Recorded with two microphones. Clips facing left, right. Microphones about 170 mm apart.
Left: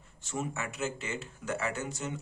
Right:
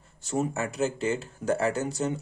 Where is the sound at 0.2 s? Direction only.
40° right (ahead or behind).